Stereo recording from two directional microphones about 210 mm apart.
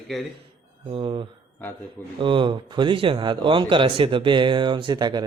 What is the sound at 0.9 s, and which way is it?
Speech, 25° right (ahead or behind).